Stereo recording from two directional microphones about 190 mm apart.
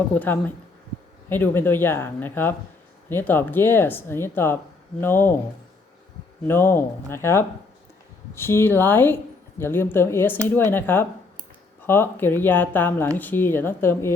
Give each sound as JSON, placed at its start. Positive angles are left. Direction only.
{"t": 0.1, "sound": "speech", "side_deg": 10}
{"t": 6.5, "sound": "speech", "side_deg": 10}